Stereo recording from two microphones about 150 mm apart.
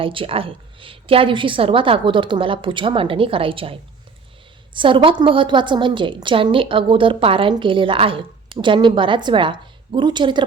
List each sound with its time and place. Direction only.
0.0 s a woman's voice: 35° right (ahead or behind)